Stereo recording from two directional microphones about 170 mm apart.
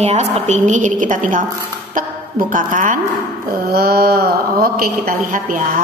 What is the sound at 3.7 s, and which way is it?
A woman's voice, 65° right (ahead or behind).